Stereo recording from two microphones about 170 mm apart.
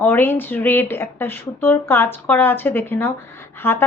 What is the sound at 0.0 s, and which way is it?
A woman's voice, 15° left (ahead or behind).